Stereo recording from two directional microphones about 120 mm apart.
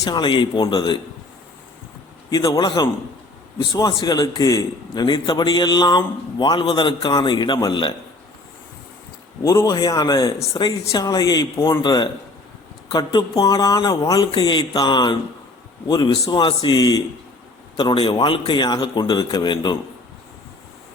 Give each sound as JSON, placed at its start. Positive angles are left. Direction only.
{"t": 0.0, "sound": "a man's voice", "side_deg": 40}
{"t": 2.3, "sound": "a man's voice", "side_deg": 30}
{"t": 9.4, "sound": "a man's voice", "side_deg": 30}
{"t": 14.3, "sound": "a man's voice", "side_deg": 40}